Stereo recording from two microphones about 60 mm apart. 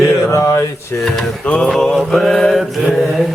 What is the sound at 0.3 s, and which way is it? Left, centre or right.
Mantra, left.